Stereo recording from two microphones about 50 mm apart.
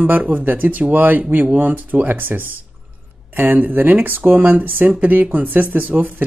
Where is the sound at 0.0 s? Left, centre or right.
Right.